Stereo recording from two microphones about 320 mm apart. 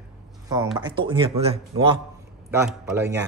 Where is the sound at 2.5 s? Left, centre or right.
Centre.